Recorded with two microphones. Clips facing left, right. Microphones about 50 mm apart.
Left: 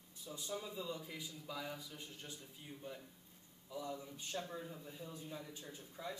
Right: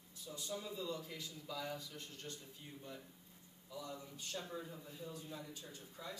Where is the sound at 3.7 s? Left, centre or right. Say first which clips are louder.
Left 3 dB; centre.